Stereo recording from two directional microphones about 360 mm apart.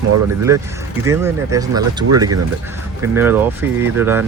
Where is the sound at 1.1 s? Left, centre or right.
Centre.